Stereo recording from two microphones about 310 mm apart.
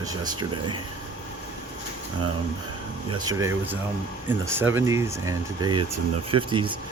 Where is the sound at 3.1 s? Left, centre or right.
Centre.